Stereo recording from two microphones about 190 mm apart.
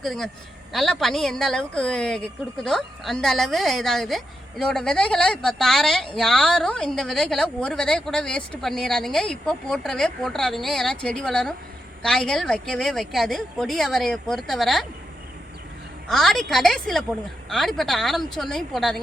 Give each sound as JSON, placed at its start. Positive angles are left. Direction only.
{"t": 0.0, "sound": "a woman's voice", "side_deg": 0}
{"t": 16.0, "sound": "a woman's voice", "side_deg": 0}